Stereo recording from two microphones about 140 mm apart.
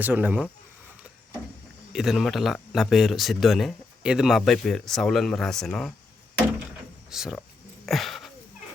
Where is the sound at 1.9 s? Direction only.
5° right (ahead or behind).